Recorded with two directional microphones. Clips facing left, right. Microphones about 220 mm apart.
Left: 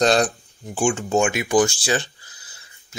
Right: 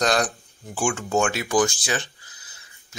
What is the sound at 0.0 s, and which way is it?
Speech, 25° left (ahead or behind).